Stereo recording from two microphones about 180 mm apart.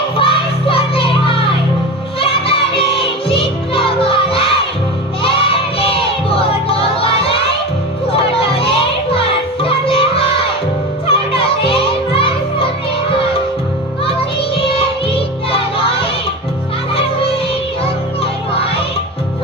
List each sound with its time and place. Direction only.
0.2 s music: 30° left (ahead or behind)
11.1 s children playing: 30° left (ahead or behind)
14.0 s music: 30° left (ahead or behind)
17.8 s children playing: 30° left (ahead or behind)